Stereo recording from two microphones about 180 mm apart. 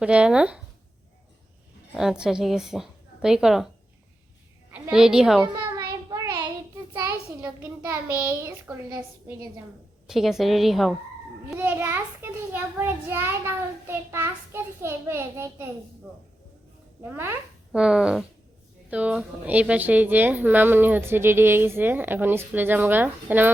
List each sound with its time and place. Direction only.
0.0 s a woman's voice: 5° right (ahead or behind)
1.9 s a woman's voice: 5° right (ahead or behind)
4.7 s a woman's voice: 5° right (ahead or behind)
5.7 s child singing: 20° right (ahead or behind)
7.0 s a woman's voice: 10° right (ahead or behind)
10.1 s a woman's voice: centre (ahead or behind)
11.5 s a woman's voice: 15° right (ahead or behind)
17.0 s a woman's voice: 15° right (ahead or behind)